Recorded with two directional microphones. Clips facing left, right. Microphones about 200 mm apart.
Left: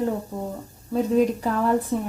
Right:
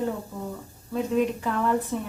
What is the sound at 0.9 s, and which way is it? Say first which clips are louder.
Speech: left 4 dB; 40° left (ahead or behind).